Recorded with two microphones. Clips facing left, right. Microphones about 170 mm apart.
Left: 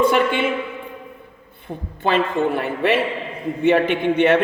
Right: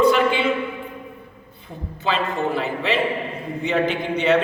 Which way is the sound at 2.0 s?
55° left (ahead or behind).